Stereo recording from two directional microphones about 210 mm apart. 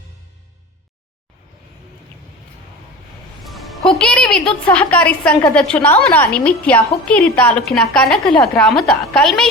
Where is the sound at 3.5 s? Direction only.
Centre (ahead or behind).